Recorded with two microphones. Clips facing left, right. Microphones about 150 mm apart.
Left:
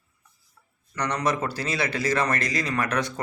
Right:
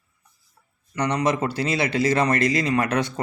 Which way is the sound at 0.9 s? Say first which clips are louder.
Right 4 dB; 25° right (ahead or behind).